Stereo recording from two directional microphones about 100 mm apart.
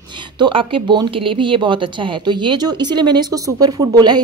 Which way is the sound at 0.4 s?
60° right (ahead or behind).